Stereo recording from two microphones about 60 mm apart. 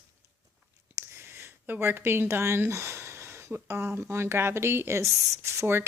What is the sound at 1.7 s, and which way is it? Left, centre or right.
Speech, right.